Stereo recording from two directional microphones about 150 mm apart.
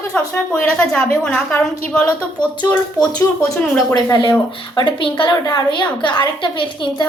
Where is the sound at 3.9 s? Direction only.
30° left (ahead or behind).